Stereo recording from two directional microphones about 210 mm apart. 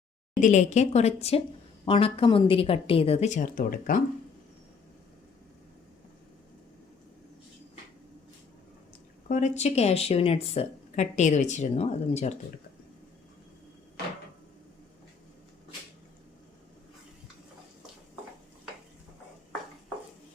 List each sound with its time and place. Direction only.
0.4 s a woman's voice: 35° left (ahead or behind)
9.3 s speech: 35° left (ahead or behind)